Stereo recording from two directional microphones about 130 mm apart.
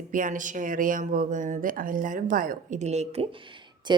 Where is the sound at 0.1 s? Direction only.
85° right.